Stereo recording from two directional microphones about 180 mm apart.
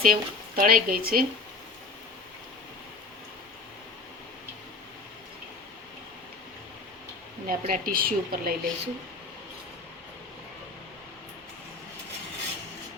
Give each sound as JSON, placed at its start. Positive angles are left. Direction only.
{"t": 0.0, "sound": "speech", "side_deg": -55}
{"t": 7.4, "sound": "a woman's voice", "side_deg": -50}